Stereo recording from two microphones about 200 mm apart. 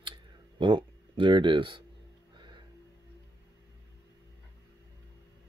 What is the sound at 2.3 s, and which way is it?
Music, 25° right (ahead or behind).